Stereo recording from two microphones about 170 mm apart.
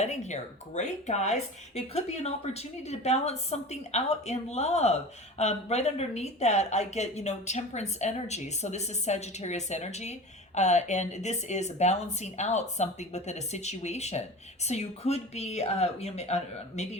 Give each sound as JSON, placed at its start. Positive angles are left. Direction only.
{"t": 0.0, "sound": "speech", "side_deg": 40}